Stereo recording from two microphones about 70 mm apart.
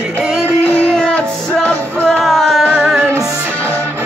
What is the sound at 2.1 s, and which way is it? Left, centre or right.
Music, centre.